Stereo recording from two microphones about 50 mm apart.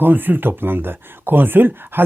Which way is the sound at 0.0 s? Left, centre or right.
Right.